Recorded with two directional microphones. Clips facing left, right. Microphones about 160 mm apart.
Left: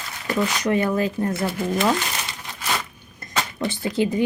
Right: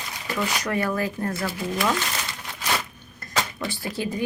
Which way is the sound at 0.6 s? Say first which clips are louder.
Left 6 dB; 20° left (ahead or behind).